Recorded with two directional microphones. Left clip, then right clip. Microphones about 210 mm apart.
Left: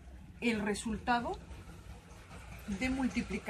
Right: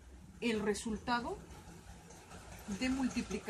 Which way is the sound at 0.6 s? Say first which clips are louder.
Even; 20° left (ahead or behind).